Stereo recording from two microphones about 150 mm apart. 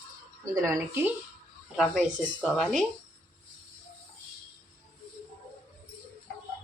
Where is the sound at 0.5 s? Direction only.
20° right (ahead or behind).